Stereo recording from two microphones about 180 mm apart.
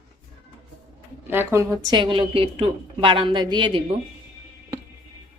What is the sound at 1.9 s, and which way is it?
A woman's voice, 30° right (ahead or behind).